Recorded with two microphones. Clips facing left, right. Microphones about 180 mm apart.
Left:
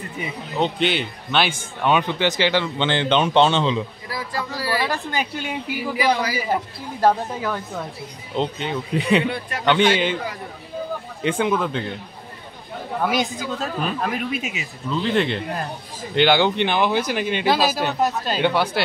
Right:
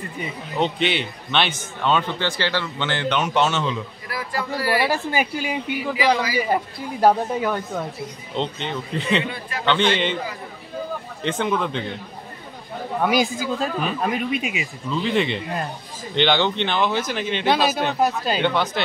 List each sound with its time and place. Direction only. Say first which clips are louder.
0.2 s speech: even; centre (ahead or behind); by 3.8 s 25° left (ahead or behind)
4.6 s speech: right 3 dB; 10° right (ahead or behind); by 10.1 s 10° left (ahead or behind)
11.2 s speech: left 2 dB; 10° left (ahead or behind)
13.0 s speech: right 2 dB; centre (ahead or behind)